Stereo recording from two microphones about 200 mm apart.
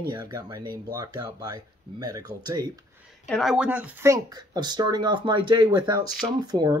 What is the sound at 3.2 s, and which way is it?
Speech, centre (ahead or behind).